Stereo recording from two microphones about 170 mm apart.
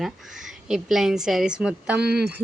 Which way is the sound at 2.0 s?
70° right (ahead or behind).